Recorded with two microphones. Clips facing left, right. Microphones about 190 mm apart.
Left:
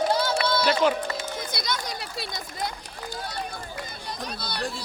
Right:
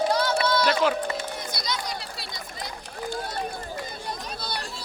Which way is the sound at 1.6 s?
50° left (ahead or behind).